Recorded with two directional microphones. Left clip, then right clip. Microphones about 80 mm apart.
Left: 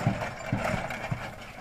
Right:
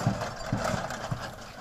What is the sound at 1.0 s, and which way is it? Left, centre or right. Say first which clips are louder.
Horse: even; left.